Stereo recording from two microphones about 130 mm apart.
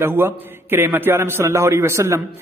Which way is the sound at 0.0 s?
15° right (ahead or behind).